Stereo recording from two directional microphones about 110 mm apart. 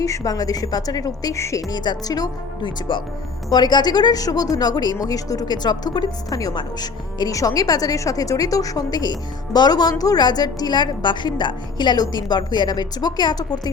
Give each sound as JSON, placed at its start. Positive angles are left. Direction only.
{"t": 0.0, "sound": "a woman's voice", "side_deg": 30}
{"t": 1.7, "sound": "a woman's voice", "side_deg": 40}